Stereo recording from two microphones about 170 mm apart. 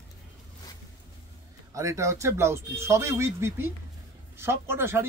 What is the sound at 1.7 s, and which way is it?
A man's voice, 20° right (ahead or behind).